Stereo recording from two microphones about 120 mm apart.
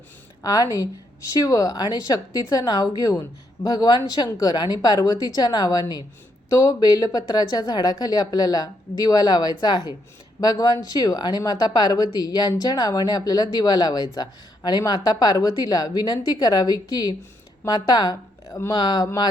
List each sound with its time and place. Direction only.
0.4 s speech: 30° left (ahead or behind)
18.7 s speech: 35° left (ahead or behind)